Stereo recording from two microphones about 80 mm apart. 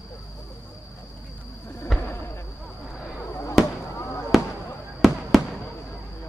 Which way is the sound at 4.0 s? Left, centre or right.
Left.